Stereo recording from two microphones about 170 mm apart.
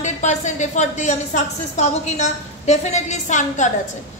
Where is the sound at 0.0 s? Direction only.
45° left (ahead or behind).